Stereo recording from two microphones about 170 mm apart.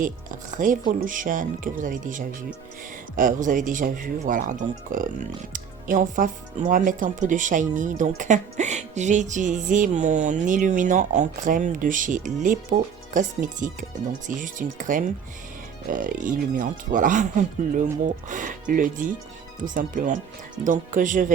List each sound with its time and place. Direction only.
0.0 s speech: 50° right (ahead or behind)
1.8 s music: 50° right (ahead or behind)
5.5 s speech: 50° right (ahead or behind)
6.7 s music: 50° right (ahead or behind)